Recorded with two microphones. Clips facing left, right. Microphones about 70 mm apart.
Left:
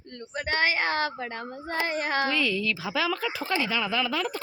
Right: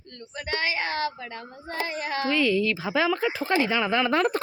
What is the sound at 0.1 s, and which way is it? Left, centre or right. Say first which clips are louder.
Speech: left 2 dB; left.